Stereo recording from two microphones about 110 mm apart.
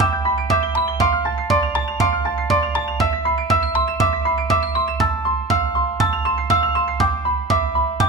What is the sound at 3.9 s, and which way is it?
Music, centre (ahead or behind).